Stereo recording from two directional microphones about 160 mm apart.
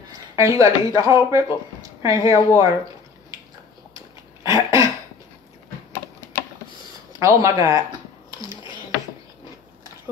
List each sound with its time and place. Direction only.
0.4 s speech: 20° right (ahead or behind)
3.9 s cough: 20° right (ahead or behind)
6.2 s typing: 15° left (ahead or behind)
7.1 s speech: 20° right (ahead or behind)